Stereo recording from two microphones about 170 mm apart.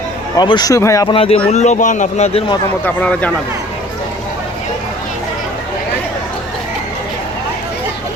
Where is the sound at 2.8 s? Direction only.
10° left (ahead or behind).